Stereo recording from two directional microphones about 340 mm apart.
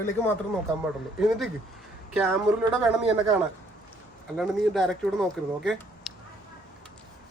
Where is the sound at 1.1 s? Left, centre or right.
Centre.